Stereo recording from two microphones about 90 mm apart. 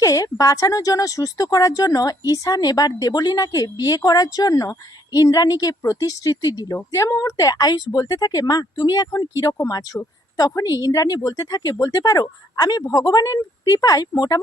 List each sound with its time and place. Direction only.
0.0 s speech: 40° left (ahead or behind)